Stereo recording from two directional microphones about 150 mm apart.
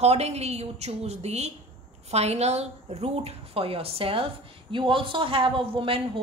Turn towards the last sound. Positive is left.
turn(degrees=-35)  # may be behind; listen again after turning